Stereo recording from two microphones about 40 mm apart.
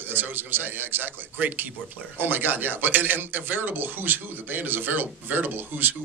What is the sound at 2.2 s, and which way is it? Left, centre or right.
Speech, right.